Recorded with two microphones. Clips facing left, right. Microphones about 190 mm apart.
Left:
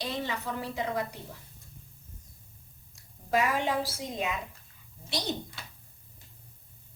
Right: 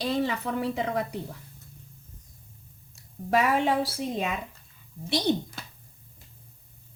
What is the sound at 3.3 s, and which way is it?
Speech, 65° right (ahead or behind).